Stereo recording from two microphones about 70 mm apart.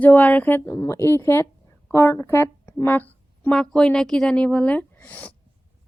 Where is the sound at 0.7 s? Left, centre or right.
Left.